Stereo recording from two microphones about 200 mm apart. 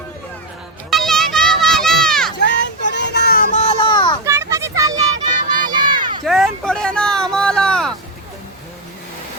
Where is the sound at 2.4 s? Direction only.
60° left (ahead or behind); by 4.2 s 20° left (ahead or behind).